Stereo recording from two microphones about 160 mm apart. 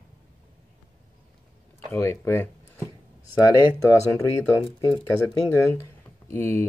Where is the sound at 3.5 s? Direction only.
20° left (ahead or behind).